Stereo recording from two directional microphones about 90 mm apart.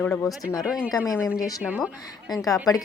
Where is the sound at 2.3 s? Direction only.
40° left (ahead or behind).